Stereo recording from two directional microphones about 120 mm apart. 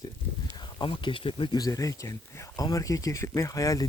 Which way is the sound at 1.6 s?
30° left (ahead or behind).